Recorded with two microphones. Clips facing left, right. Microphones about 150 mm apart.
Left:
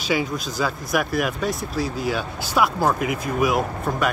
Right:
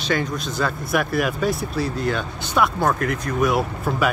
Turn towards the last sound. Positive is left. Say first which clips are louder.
# right 1 dB
turn(degrees=0)  # may be behind; listen again after turning